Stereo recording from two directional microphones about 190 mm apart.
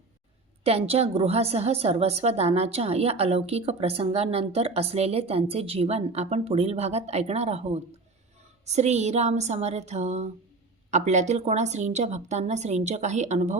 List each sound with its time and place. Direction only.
0.6 s a woman's voice: 35° right (ahead or behind)